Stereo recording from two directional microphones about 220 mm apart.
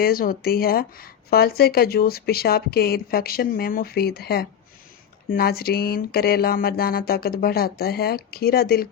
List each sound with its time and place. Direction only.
0.0 s a woman's voice: 40° left (ahead or behind)